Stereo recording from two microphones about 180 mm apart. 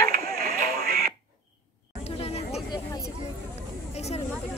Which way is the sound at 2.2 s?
35° left (ahead or behind).